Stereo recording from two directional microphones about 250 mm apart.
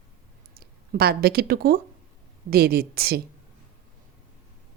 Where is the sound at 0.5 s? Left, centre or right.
Right.